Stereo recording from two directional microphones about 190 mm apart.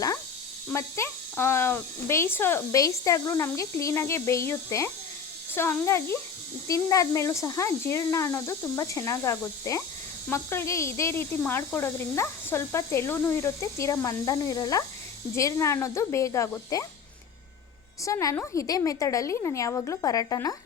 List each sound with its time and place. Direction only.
0.7 s speech: 15° left (ahead or behind)
18.0 s speech: 15° left (ahead or behind)